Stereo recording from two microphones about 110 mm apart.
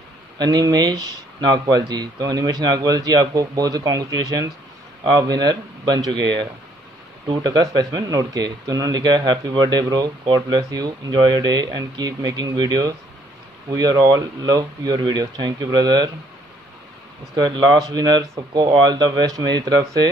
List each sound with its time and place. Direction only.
0.4 s a man's voice: 35° right (ahead or behind)
17.4 s a man's voice: 40° right (ahead or behind)